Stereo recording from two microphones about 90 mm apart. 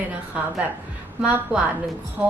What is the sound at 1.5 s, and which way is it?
Speech, 20° right (ahead or behind).